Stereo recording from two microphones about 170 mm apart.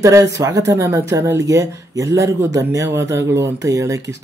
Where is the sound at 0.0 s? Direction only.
20° right (ahead or behind).